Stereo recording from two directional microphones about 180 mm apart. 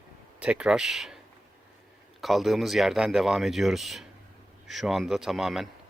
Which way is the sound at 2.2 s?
Centre (ahead or behind).